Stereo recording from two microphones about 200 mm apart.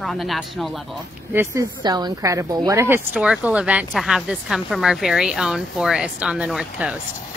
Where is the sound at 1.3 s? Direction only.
15° right (ahead or behind).